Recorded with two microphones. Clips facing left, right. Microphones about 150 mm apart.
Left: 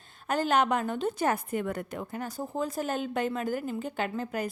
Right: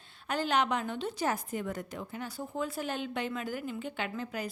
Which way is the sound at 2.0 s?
45° left (ahead or behind).